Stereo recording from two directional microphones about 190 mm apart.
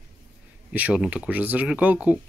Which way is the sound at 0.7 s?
5° right (ahead or behind).